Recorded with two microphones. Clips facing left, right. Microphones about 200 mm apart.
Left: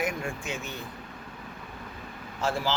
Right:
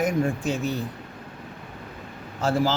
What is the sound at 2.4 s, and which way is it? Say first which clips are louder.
Speech: right 6 dB; 40° right (ahead or behind).